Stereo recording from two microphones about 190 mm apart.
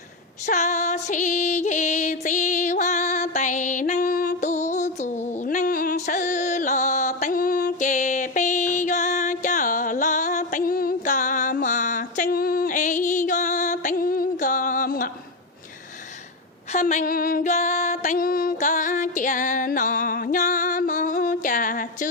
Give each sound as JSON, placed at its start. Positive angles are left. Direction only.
{"t": 0.4, "sound": "music", "side_deg": 40}
{"t": 16.7, "sound": "female singing", "side_deg": 40}